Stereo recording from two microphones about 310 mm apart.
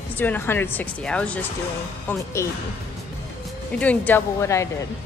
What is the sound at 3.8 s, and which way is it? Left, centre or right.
Speech, centre.